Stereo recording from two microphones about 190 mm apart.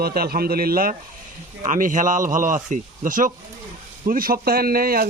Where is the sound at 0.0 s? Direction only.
55° right (ahead or behind).